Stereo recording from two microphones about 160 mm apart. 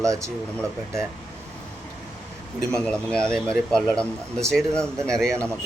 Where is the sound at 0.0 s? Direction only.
20° right (ahead or behind).